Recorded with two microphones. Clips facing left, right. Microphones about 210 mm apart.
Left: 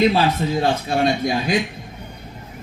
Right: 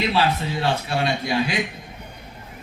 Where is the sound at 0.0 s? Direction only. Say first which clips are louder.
Left 5 dB; 45° left (ahead or behind).